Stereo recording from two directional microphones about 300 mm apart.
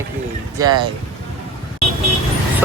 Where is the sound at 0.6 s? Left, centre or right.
Centre.